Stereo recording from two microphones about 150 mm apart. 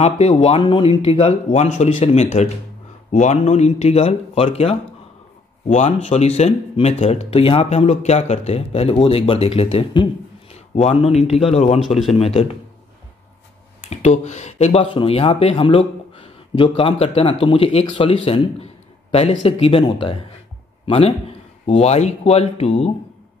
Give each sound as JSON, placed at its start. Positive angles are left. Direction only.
{"t": 0.0, "sound": "speech", "side_deg": 45}
{"t": 13.7, "sound": "a man's voice", "side_deg": 50}